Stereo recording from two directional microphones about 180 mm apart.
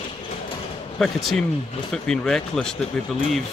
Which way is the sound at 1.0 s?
Centre (ahead or behind).